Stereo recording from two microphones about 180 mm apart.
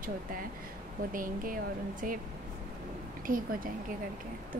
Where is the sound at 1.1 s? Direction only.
50° right (ahead or behind).